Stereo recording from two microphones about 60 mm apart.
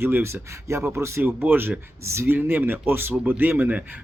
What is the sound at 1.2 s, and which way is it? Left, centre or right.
Speech, right.